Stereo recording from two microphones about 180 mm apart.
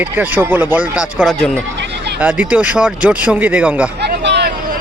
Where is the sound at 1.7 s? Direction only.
75° right (ahead or behind).